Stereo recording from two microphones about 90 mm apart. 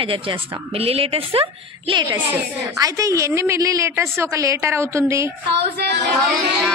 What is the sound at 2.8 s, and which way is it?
A woman's voice, 35° right (ahead or behind).